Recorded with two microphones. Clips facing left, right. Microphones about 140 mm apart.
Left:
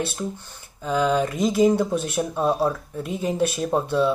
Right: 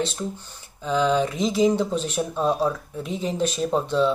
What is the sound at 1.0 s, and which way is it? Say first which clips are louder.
Speech: left 1 dB; 5° left (ahead or behind).